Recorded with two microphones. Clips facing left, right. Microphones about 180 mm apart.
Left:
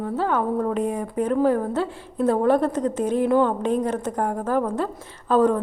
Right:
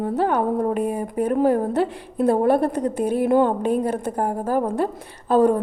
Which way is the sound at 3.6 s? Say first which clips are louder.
Right 1 dB; 10° right (ahead or behind).